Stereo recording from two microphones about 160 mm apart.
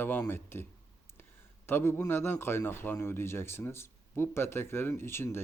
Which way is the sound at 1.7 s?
15° left (ahead or behind).